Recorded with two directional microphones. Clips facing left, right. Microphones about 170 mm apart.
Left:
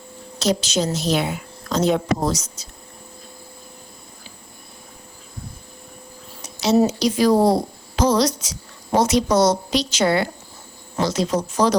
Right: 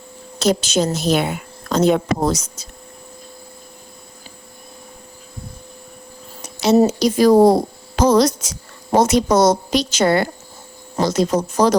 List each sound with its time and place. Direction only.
0.3 s a woman's voice: 50° right (ahead or behind)
6.4 s a woman's voice: 55° right (ahead or behind)